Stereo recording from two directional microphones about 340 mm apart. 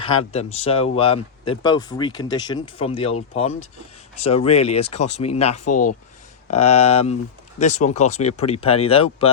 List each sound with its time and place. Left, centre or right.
0.0 s speech: centre